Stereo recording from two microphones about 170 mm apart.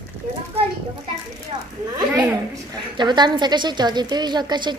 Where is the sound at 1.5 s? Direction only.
25° right (ahead or behind).